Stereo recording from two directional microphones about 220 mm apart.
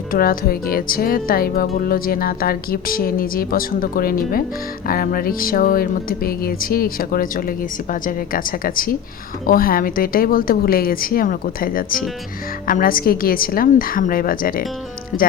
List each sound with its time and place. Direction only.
0.1 s speech: 40° left (ahead or behind)